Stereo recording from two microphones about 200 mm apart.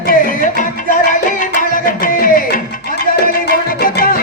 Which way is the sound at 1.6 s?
45° left (ahead or behind).